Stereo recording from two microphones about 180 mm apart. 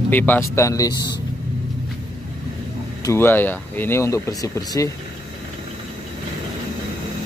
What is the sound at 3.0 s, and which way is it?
Speech, 15° left (ahead or behind).